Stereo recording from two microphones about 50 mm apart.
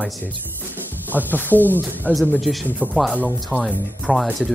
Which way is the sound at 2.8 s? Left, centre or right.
Right.